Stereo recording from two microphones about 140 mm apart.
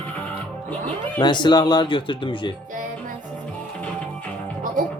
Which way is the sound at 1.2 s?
35° left (ahead or behind).